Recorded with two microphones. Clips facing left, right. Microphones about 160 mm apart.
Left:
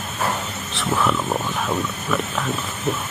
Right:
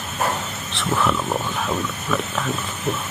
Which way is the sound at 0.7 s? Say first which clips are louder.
Even; centre (ahead or behind).